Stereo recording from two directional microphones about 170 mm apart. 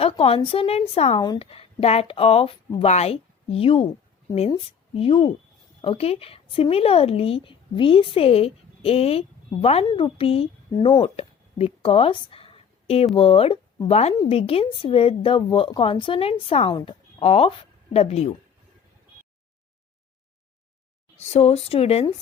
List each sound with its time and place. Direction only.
0.0 s a woman's voice: 35° left (ahead or behind)
1.2 s speech: 25° left (ahead or behind)
1.5 s a woman's voice: 35° left (ahead or behind)
21.2 s a woman's voice: 40° left (ahead or behind)